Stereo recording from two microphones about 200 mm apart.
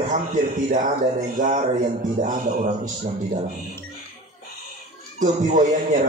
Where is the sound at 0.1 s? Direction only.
40° right (ahead or behind).